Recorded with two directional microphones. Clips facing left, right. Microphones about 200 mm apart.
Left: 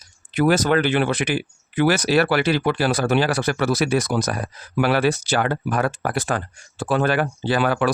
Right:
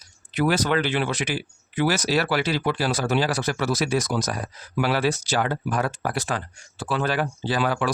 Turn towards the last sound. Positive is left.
turn(degrees=60)  # may be behind; listen again after turning